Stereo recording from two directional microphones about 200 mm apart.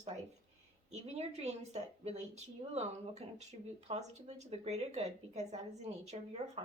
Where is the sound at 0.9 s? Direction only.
35° right (ahead or behind).